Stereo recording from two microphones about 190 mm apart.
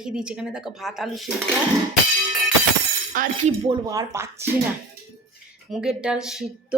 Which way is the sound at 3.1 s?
45° right (ahead or behind).